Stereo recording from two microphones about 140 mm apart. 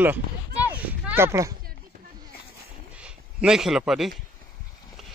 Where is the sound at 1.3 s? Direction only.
20° right (ahead or behind).